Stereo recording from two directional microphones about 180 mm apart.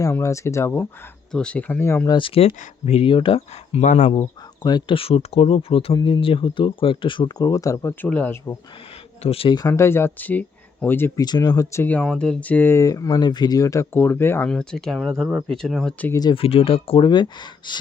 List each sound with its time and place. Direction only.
0.0 s speech: 15° left (ahead or behind)
2.1 s speech: 30° left (ahead or behind)
4.1 s speech: 25° left (ahead or behind)
9.2 s speech: 30° left (ahead or behind); by 11.3 s 10° left (ahead or behind)
11.3 s speech: 25° left (ahead or behind); by 16.1 s 5° left (ahead or behind)
16.1 s speech: 25° left (ahead or behind)